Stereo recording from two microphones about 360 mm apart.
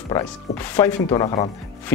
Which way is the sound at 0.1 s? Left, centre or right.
Centre.